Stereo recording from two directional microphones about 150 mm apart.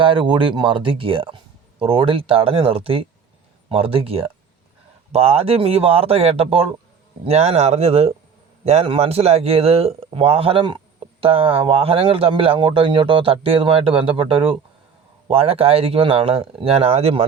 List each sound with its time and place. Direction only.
0.0 s speech: 35° right (ahead or behind)